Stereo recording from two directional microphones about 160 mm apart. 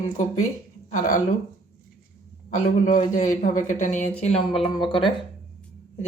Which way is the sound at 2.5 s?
50° left (ahead or behind).